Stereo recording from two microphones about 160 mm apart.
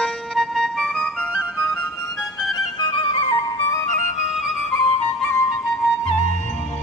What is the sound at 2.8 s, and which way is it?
Music, 30° left (ahead or behind).